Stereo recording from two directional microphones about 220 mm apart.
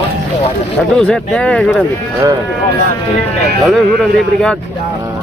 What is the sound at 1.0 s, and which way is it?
Speech, 5° left (ahead or behind).